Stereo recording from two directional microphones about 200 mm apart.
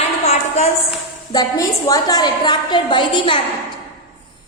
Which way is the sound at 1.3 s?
20° left (ahead or behind).